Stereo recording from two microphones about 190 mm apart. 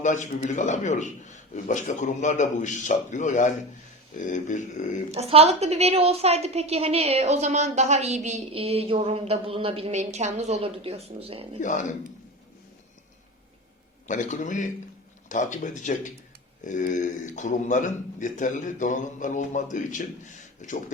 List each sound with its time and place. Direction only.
0.0 s a man's voice: 40° left (ahead or behind)
5.1 s a woman's voice: 30° right (ahead or behind)
11.6 s a man's voice: 40° left (ahead or behind)
14.1 s a man's voice: 40° left (ahead or behind)